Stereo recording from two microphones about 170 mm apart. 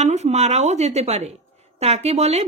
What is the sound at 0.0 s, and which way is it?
A woman's voice, 40° right (ahead or behind).